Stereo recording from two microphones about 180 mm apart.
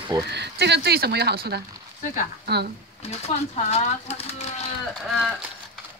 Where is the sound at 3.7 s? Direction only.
35° left (ahead or behind).